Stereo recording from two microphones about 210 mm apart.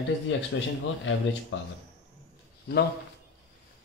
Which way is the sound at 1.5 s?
60° left (ahead or behind).